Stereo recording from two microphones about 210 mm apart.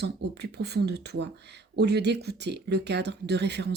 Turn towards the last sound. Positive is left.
turn(degrees=-55)  # may be behind; listen again after turning